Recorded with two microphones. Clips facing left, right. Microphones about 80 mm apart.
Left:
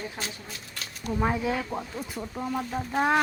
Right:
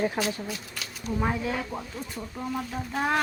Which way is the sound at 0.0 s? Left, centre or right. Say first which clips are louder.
Right 9 dB; right.